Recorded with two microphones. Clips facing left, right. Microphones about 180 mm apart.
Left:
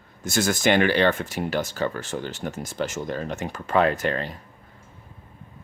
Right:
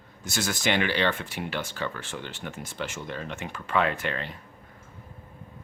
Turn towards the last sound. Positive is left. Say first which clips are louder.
# left 6 dB
turn(degrees=40)  # may be behind; listen again after turning